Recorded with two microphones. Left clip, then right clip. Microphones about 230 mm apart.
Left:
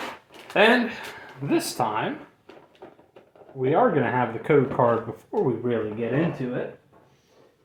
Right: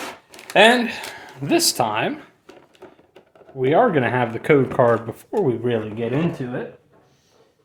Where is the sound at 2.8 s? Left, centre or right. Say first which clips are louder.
Right 2 dB; right.